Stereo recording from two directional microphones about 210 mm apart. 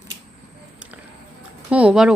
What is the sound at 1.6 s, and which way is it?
Speech, 5° right (ahead or behind).